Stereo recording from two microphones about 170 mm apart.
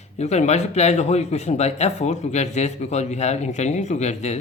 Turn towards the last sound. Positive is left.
turn(degrees=40)  # may be behind; listen again after turning